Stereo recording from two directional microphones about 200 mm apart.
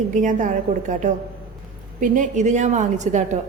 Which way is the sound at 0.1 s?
40° right (ahead or behind).